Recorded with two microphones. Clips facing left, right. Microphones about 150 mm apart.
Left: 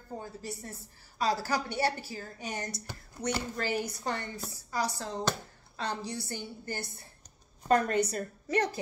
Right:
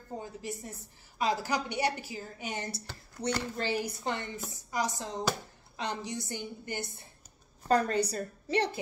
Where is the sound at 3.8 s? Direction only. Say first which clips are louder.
Even; 25° right (ahead or behind).